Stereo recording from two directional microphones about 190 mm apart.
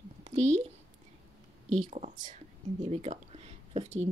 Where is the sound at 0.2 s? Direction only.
35° right (ahead or behind).